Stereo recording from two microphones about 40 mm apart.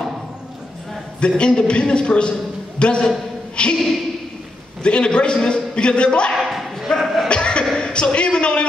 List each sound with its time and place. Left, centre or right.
1.4 s a man's voice: left
3.7 s speech: centre
4.8 s a man's voice: left
6.3 s dog: centre
7.0 s a sound: centre
7.2 s music: left
7.7 s a sound: left